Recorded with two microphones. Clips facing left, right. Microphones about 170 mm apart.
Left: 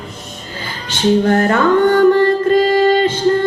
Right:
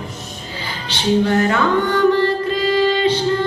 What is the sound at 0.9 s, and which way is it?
Music, 50° left (ahead or behind).